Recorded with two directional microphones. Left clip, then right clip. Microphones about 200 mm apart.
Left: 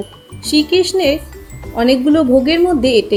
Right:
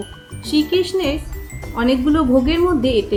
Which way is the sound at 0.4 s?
15° left (ahead or behind).